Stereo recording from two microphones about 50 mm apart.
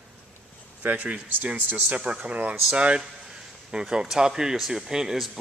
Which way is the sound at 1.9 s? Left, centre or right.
Right.